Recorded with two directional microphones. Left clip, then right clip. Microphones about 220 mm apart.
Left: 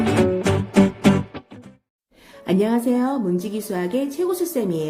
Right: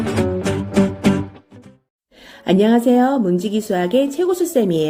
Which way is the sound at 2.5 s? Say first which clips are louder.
Right 6 dB; 15° right (ahead or behind).